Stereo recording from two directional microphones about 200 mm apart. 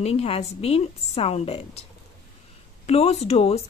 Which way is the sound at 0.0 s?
30° left (ahead or behind).